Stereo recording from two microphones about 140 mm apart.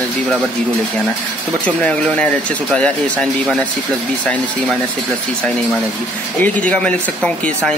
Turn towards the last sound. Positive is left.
turn(degrees=10)  # may be behind; listen again after turning